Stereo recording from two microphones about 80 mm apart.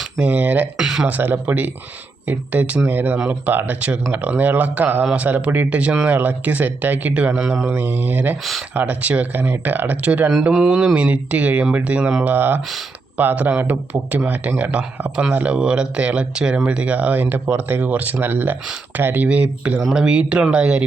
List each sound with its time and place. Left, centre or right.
0.2 s speech: centre
0.8 s speech: centre
1.0 s speech: right
7.8 s speech: right